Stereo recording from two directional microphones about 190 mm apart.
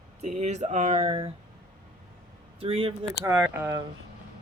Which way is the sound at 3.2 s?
10° right (ahead or behind).